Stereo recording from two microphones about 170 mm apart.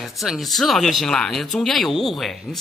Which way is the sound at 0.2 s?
Centre (ahead or behind).